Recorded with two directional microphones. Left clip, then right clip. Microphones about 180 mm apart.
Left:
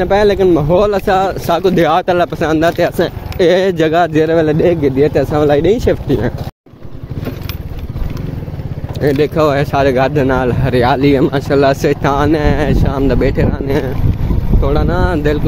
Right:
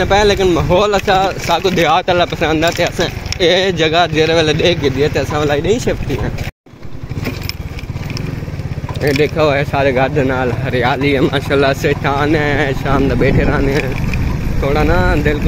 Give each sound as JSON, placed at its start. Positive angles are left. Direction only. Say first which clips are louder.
{"t": 0.0, "sound": "speech", "louder": "left 1 dB", "side_deg": 65}
{"t": 9.0, "sound": "speech", "louder": "left 1 dB", "side_deg": 40}
{"t": 14.6, "sound": "speech", "louder": "right 2 dB", "side_deg": 50}